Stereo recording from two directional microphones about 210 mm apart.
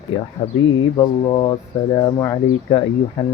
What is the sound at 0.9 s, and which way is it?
Speech, 15° left (ahead or behind).